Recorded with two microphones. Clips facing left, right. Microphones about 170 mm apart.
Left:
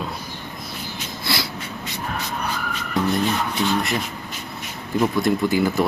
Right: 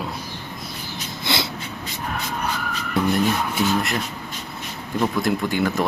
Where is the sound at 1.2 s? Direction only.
25° right (ahead or behind).